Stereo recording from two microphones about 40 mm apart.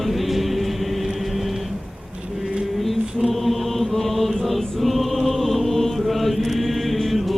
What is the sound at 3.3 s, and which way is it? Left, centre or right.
Chant, centre.